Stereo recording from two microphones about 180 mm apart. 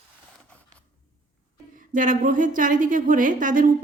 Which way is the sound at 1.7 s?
50° right (ahead or behind).